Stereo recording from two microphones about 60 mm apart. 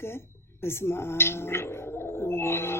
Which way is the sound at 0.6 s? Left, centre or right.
Left.